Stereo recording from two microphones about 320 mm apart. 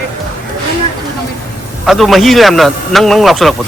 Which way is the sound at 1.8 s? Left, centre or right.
Centre.